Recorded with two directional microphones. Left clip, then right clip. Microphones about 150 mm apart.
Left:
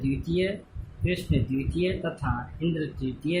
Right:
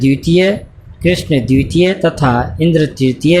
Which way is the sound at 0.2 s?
50° right (ahead or behind).